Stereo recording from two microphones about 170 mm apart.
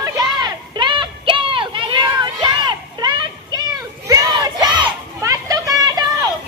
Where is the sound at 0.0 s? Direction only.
25° right (ahead or behind).